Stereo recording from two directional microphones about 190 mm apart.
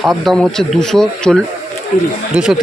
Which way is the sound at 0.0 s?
Centre (ahead or behind).